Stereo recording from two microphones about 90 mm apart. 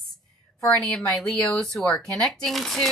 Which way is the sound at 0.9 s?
5° left (ahead or behind).